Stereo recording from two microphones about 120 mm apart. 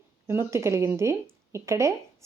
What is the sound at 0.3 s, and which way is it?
Speech, 20° right (ahead or behind).